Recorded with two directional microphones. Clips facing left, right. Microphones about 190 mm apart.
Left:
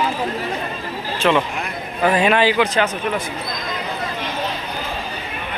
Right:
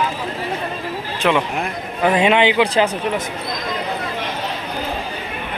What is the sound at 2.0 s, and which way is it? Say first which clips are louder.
Speech: right 1 dB; 20° right (ahead or behind).